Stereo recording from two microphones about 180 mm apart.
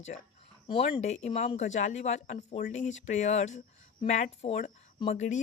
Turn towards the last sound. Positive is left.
turn(degrees=40)  # may be behind; listen again after turning